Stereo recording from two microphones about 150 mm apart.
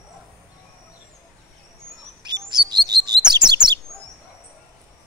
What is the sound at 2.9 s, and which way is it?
Chirp, 30° right (ahead or behind).